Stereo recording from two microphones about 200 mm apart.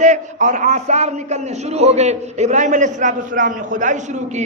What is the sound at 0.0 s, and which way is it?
A man's voice, 40° right (ahead or behind).